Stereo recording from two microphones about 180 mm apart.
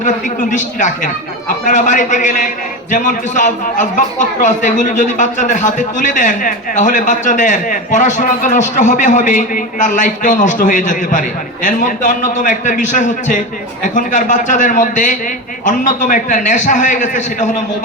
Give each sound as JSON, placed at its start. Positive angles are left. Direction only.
{"t": 0.0, "sound": "a man's voice", "side_deg": 45}